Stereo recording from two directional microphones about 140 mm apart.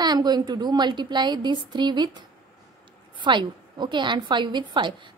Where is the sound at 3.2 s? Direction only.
35° right (ahead or behind).